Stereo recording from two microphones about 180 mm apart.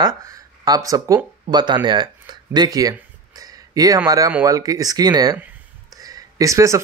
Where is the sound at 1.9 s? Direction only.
25° right (ahead or behind).